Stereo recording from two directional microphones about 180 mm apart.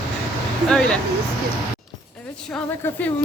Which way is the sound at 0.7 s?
5° left (ahead or behind).